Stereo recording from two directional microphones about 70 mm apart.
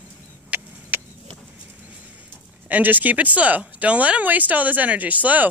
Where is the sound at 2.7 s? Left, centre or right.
Right.